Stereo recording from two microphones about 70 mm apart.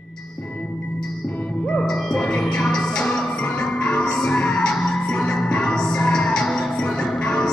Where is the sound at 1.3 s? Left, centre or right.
Left.